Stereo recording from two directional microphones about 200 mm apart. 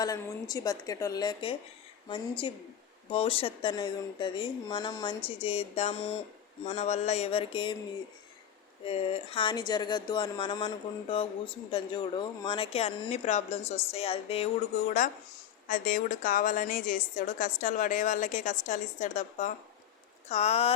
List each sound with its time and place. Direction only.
0.0 s a woman's voice: 20° left (ahead or behind)
8.8 s speech: 30° left (ahead or behind)